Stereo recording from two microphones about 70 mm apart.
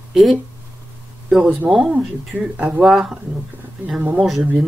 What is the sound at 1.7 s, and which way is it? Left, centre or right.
Speech, right.